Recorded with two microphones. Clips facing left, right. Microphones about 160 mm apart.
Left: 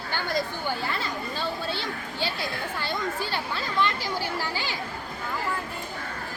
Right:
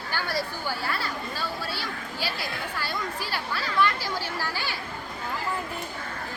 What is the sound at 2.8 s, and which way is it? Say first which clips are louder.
Speech: left 3 dB; 25° left (ahead or behind).